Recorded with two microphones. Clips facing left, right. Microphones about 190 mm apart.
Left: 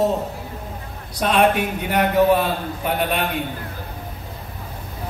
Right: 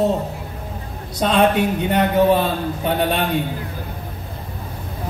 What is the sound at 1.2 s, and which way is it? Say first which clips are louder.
A man's voice: right 2 dB; 30° right (ahead or behind).